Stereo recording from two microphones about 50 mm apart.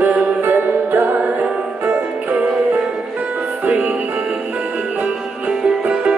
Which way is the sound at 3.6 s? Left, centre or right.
Right.